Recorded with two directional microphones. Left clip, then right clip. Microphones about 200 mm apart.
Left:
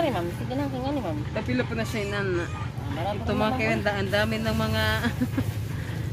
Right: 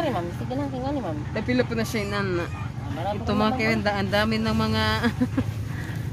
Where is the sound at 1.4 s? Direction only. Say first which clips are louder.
Right 5 dB; 55° right (ahead or behind).